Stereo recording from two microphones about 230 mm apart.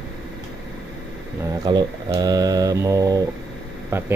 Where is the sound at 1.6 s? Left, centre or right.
Centre.